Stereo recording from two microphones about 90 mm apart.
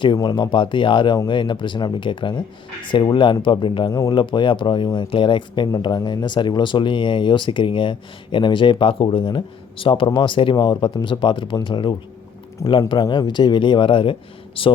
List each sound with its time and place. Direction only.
0.2 s speech: 55° left (ahead or behind); by 14.7 s 80° left